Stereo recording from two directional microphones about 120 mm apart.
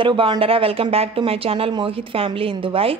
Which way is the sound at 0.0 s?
40° right (ahead or behind).